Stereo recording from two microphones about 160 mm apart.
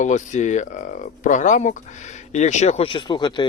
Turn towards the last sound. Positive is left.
turn(degrees=25)  # may be behind; listen again after turning